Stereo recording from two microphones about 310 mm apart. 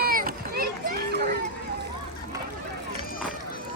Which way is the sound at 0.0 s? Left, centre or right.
Right.